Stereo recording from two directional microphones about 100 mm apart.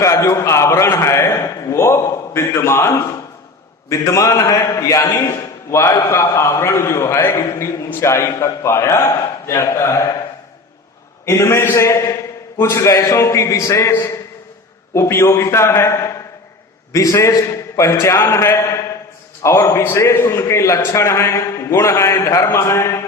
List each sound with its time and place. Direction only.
0.0 s a man's voice: 30° left (ahead or behind)
11.3 s a man's voice: 25° left (ahead or behind)